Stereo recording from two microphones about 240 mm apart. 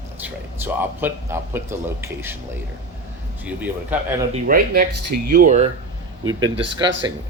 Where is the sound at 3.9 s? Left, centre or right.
Centre.